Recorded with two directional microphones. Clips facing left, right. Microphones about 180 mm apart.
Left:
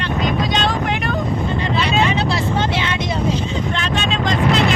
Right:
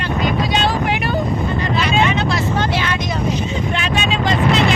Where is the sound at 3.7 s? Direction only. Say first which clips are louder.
Right 1 dB; 10° right (ahead or behind).